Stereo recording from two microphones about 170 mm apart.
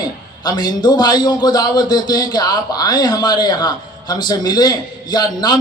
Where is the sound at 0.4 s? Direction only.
25° left (ahead or behind).